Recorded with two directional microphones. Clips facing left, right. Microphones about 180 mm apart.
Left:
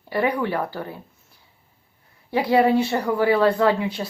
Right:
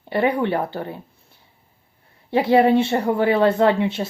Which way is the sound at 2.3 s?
25° right (ahead or behind).